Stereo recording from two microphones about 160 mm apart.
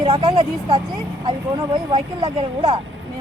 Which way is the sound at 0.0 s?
30° right (ahead or behind).